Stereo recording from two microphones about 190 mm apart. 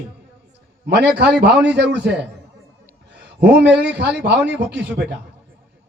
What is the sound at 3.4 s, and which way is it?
A man's voice, 60° right (ahead or behind).